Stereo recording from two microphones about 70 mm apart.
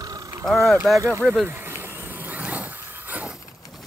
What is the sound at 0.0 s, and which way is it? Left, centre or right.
Vehicle, right.